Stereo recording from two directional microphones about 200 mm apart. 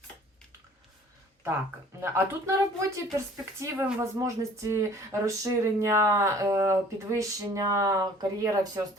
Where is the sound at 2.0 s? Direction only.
15° right (ahead or behind).